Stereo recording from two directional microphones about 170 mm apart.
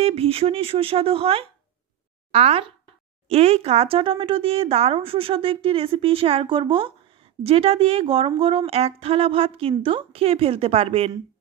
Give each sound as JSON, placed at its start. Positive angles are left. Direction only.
{"t": 0.0, "sound": "speech", "side_deg": -35}